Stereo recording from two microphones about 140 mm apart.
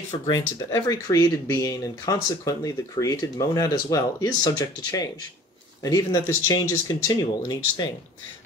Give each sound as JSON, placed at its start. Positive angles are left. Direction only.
{"t": 0.3, "sound": "speech", "side_deg": 25}